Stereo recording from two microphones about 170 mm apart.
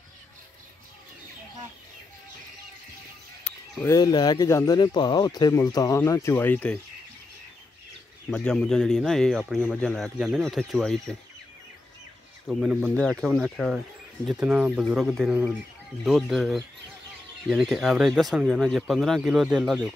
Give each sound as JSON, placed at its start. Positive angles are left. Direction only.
{"t": 3.4, "sound": "speech", "side_deg": 20}
{"t": 8.3, "sound": "speech", "side_deg": 5}
{"t": 12.4, "sound": "speech", "side_deg": 0}